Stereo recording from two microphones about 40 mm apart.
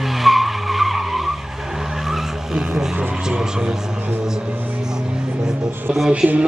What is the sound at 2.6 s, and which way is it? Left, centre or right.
Vehicle, centre.